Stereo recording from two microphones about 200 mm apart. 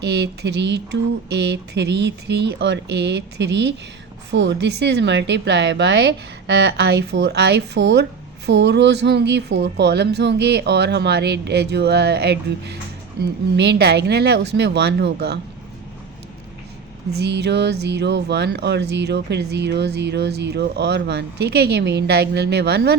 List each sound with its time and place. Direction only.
0.0 s speech: 55° right (ahead or behind)
17.2 s speech: 60° right (ahead or behind)